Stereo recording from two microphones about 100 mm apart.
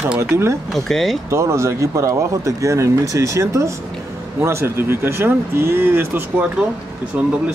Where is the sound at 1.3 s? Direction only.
30° right (ahead or behind).